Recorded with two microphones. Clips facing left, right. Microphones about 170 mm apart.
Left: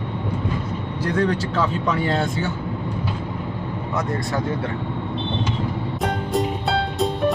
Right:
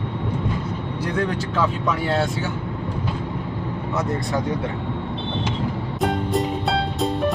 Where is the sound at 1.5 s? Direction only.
10° right (ahead or behind).